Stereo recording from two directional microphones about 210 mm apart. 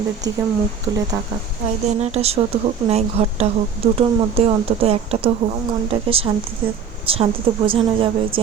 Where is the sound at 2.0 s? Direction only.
30° right (ahead or behind).